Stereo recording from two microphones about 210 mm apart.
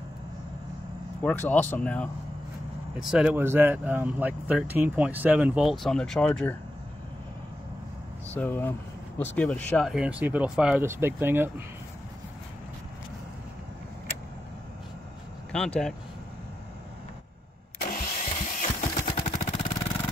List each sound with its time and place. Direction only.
1.2 s speech: 10° left (ahead or behind)
8.4 s speech: 10° left (ahead or behind); by 11.6 s 10° right (ahead or behind)
15.5 s speech: 5° left (ahead or behind)
17.7 s engine starting: 40° left (ahead or behind)